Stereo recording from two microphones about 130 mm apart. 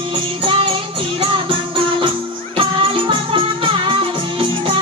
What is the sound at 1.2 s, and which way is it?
Music, 40° right (ahead or behind).